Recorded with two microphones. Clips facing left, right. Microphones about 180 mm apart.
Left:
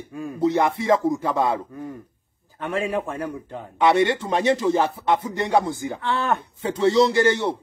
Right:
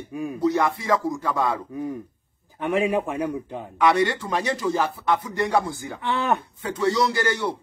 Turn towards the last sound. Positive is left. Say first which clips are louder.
# left 4 dB
turn(degrees=25)  # may be behind; listen again after turning